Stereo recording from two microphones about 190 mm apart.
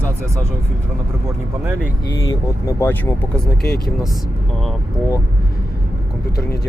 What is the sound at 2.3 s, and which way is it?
Speech, 15° left (ahead or behind).